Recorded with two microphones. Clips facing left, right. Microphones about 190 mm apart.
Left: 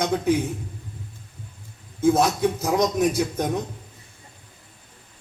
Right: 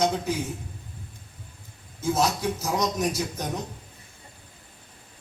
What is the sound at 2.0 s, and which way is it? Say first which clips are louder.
Speech: left 6 dB; 55° left (ahead or behind).